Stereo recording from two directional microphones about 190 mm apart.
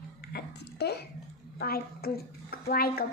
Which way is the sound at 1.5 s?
55° left (ahead or behind).